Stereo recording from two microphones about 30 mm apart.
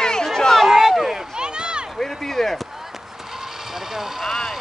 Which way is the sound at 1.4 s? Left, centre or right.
Right.